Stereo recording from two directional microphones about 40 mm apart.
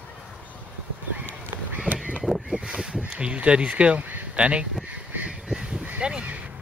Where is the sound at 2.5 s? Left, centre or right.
Right.